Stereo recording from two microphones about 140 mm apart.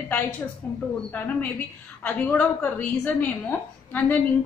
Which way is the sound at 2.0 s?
10° left (ahead or behind).